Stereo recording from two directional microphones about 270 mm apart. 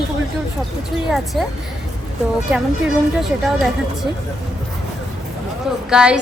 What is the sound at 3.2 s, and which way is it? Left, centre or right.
Speech, centre.